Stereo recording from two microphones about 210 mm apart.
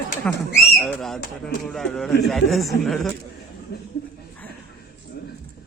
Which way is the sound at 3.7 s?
50° left (ahead or behind).